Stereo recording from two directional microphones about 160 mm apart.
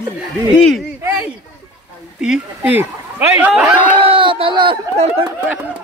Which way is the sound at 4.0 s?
30° right (ahead or behind).